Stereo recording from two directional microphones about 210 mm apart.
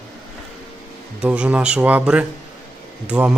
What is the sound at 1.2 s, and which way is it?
Speech, 5° right (ahead or behind).